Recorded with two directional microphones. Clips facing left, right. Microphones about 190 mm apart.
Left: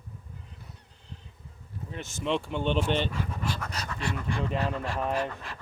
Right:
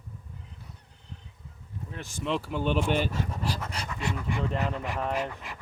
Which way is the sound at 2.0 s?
Centre (ahead or behind).